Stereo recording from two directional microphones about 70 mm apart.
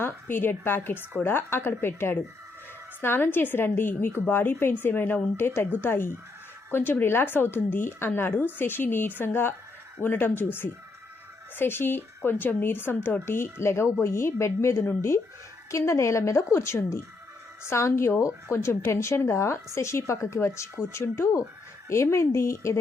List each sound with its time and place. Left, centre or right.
0.0 s a woman's voice: left